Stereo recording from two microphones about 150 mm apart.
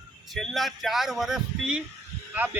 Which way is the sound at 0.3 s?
Centre (ahead or behind).